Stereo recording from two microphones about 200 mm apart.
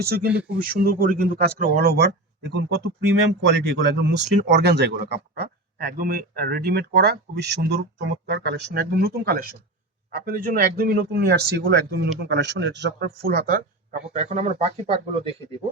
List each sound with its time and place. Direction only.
0.0 s speech: 50° right (ahead or behind); by 15.4 s 30° right (ahead or behind)